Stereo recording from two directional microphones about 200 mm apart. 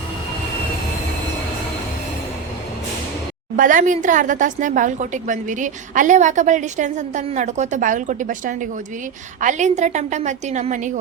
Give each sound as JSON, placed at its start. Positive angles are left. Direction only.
{"t": 3.6, "sound": "a woman's voice", "side_deg": -40}